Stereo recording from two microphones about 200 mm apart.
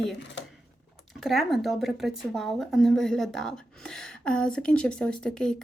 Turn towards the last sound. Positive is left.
turn(degrees=5)  # may be behind; listen again after turning